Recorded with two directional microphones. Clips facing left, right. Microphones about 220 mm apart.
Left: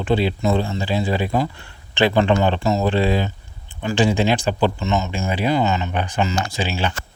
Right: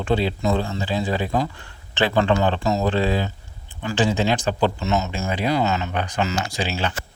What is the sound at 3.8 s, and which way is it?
Speech, 15° left (ahead or behind).